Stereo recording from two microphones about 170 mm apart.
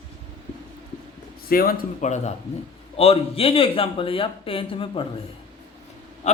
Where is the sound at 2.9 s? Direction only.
35° left (ahead or behind).